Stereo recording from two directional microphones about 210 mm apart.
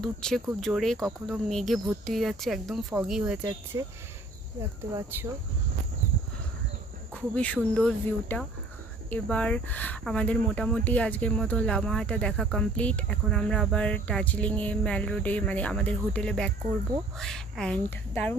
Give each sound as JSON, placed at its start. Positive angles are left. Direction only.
{"t": 0.0, "sound": "speech", "side_deg": 0}
{"t": 3.7, "sound": "speech", "side_deg": -15}
{"t": 4.9, "sound": "speech", "side_deg": -10}
{"t": 7.2, "sound": "speech", "side_deg": 5}